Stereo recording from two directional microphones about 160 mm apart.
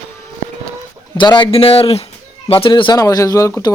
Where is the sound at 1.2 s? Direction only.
30° left (ahead or behind).